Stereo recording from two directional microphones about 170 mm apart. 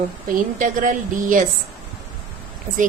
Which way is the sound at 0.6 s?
50° right (ahead or behind).